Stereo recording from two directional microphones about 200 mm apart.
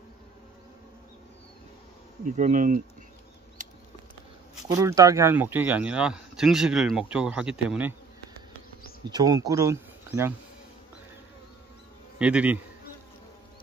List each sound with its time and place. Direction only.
2.3 s speech: 40° right (ahead or behind)
4.6 s speech: 15° right (ahead or behind)
9.1 s speech: 20° right (ahead or behind)
12.2 s speech: 5° right (ahead or behind)